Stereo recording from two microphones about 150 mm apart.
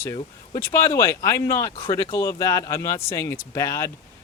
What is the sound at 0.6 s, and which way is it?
Speech, 20° left (ahead or behind).